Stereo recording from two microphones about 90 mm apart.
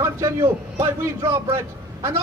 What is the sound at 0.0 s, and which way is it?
A man's voice, 30° right (ahead or behind).